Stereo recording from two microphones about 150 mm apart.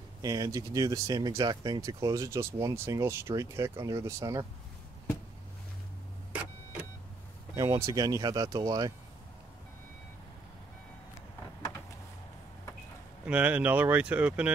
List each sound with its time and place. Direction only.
0.2 s speech: 25° right (ahead or behind)
7.5 s speech: 25° right (ahead or behind)
13.2 s speech: 10° right (ahead or behind)